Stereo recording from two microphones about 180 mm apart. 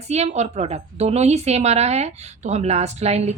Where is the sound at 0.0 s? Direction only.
35° right (ahead or behind).